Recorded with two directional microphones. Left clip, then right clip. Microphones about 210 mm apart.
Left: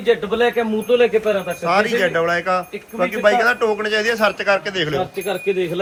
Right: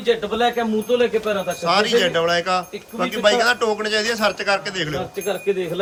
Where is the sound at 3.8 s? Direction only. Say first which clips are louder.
Left 2 dB; 15° right (ahead or behind).